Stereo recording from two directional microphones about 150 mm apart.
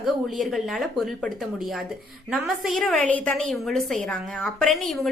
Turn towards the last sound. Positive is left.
turn(degrees=0)  # may be behind; listen again after turning